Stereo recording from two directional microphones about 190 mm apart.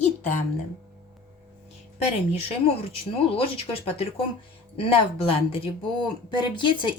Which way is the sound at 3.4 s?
30° left (ahead or behind).